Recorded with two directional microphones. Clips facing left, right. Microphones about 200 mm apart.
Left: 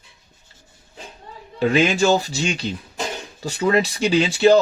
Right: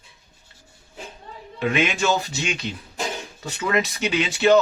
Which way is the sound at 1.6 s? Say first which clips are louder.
Left 5 dB; 35° left (ahead or behind).